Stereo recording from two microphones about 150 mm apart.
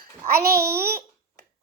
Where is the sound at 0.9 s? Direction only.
90° right.